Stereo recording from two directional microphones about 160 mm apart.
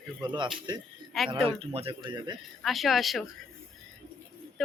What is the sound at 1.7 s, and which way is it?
Speech, 40° right (ahead or behind).